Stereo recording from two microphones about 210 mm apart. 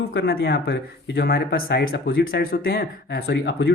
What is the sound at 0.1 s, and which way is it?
Speech, 50° left (ahead or behind).